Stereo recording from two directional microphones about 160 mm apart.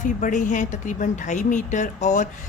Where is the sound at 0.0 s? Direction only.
50° left (ahead or behind).